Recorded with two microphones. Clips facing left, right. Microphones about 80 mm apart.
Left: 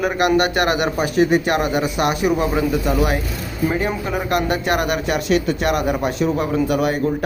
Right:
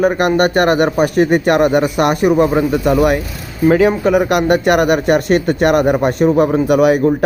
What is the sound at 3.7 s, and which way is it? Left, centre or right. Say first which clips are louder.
Speech: right 12 dB; right.